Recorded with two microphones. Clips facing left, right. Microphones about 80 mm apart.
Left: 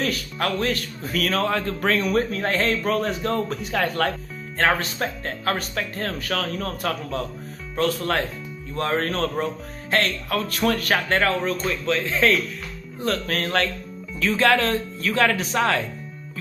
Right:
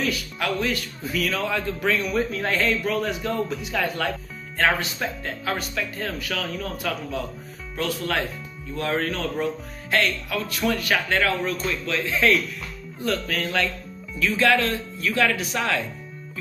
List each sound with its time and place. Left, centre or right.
0.0 s speech: left
13.1 s speech: left